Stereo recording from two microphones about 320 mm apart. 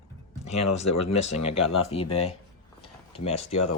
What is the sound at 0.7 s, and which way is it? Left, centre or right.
Speech, left.